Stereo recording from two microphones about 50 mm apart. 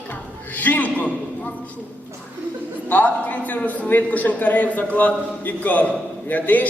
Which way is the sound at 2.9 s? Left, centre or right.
Left.